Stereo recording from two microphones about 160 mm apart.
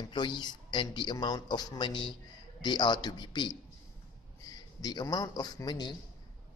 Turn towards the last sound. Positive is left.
turn(degrees=25)  # may be behind; listen again after turning